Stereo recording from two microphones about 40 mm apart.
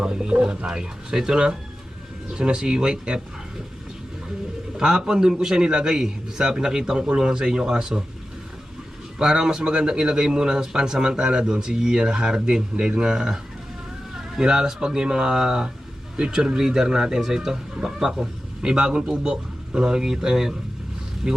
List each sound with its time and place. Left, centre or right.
0.0 s speech: right
4.8 s a man's voice: centre
9.1 s a man's voice: centre
18.6 s a man's voice: right